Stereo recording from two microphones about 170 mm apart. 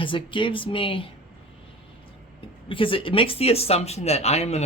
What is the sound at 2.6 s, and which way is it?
Speech, 30° left (ahead or behind).